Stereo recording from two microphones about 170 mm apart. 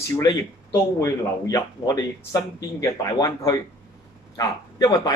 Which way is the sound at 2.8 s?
20° left (ahead or behind).